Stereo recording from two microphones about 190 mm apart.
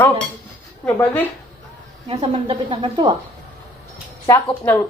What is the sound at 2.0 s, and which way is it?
Speech, 25° right (ahead or behind).